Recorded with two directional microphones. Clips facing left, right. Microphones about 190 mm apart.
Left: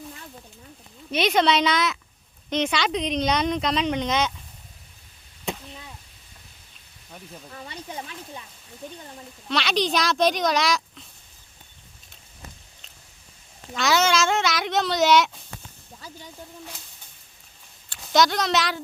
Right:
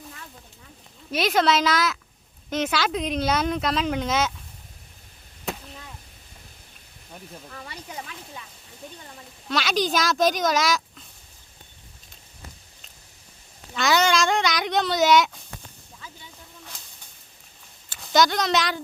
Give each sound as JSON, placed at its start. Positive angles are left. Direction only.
{"t": 1.1, "sound": "speech", "side_deg": 0}
{"t": 5.5, "sound": "chop", "side_deg": -5}
{"t": 7.5, "sound": "speech", "side_deg": 20}
{"t": 9.5, "sound": "speech", "side_deg": 0}
{"t": 13.7, "sound": "speech", "side_deg": 0}
{"t": 16.0, "sound": "hiss", "side_deg": 40}
{"t": 17.8, "sound": "speech", "side_deg": 0}